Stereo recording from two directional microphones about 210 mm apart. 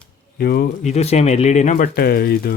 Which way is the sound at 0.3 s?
50° left (ahead or behind).